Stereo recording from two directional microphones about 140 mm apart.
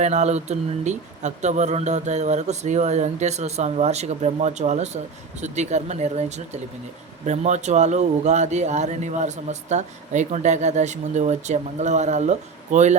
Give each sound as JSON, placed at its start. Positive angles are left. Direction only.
{"t": 0.0, "sound": "a man's voice", "side_deg": -55}